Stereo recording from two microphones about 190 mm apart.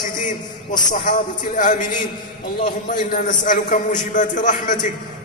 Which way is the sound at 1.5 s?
40° left (ahead or behind).